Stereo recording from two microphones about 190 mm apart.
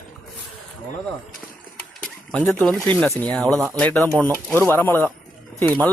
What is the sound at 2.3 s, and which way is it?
Speech, 5° left (ahead or behind).